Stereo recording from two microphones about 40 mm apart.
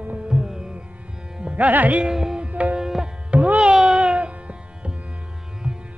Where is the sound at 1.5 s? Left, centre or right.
Right.